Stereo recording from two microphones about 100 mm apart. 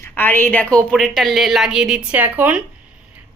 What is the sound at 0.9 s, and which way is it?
Speech, 5° left (ahead or behind).